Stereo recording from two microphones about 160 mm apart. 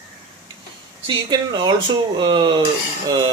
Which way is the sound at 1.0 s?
25° right (ahead or behind).